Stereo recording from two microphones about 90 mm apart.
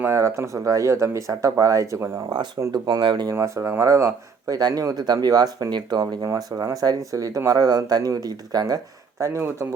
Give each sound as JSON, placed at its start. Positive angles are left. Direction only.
{"t": 0.1, "sound": "speech", "side_deg": -35}
{"t": 2.7, "sound": "speech", "side_deg": -55}
{"t": 3.3, "sound": "speech", "side_deg": -35}
{"t": 6.2, "sound": "speech", "side_deg": -35}
{"t": 9.1, "sound": "speech", "side_deg": -30}